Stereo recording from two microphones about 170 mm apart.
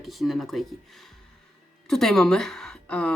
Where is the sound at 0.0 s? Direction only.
Centre (ahead or behind).